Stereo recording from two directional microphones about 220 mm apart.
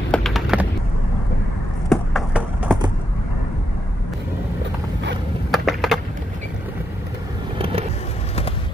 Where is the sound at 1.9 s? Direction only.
5° right (ahead or behind).